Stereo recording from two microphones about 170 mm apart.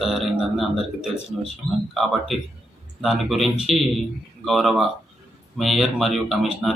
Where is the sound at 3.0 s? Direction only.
Centre (ahead or behind).